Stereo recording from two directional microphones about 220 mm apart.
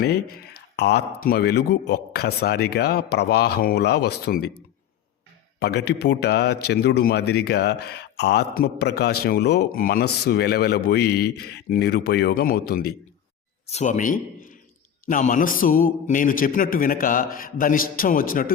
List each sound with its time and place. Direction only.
0.8 s speech: 50° left (ahead or behind)
5.5 s a man's voice: 50° left (ahead or behind)
13.7 s a man's voice: 30° left (ahead or behind)